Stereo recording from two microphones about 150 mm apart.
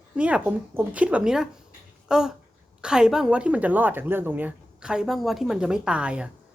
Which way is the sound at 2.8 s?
5° right (ahead or behind).